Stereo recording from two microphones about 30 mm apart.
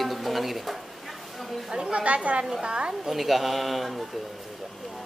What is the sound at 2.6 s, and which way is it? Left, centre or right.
Speech, right.